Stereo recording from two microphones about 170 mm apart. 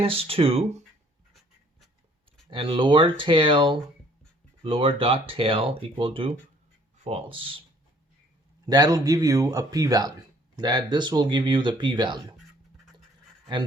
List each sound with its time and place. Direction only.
0.0 s speech: 35° right (ahead or behind)
1.3 s writing: centre (ahead or behind)
2.5 s speech: 30° right (ahead or behind)
8.6 s speech: 20° right (ahead or behind)